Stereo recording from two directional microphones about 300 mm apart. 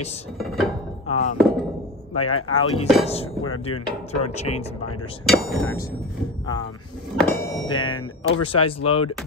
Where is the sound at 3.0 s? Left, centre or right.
Centre.